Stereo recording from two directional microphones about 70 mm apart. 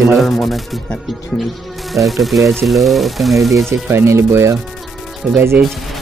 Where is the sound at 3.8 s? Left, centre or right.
Right.